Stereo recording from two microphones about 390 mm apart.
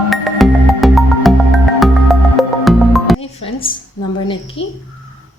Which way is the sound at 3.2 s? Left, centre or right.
Centre.